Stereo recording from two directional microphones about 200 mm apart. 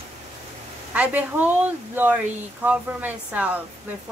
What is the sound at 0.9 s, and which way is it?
Speech, 10° right (ahead or behind).